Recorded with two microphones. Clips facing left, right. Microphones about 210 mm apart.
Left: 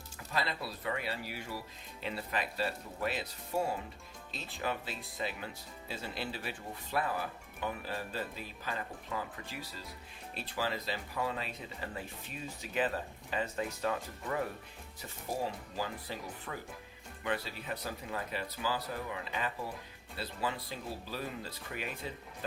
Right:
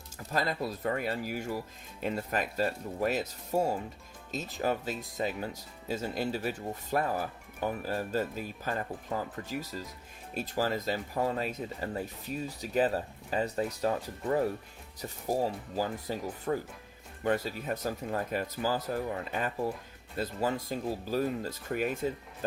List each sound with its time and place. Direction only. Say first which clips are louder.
0.3 s speech: right 5 dB; 45° right (ahead or behind)